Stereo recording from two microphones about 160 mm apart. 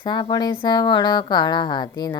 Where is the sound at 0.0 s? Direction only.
30° left (ahead or behind).